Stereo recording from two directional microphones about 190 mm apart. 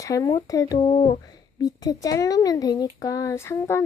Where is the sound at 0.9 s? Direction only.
30° left (ahead or behind).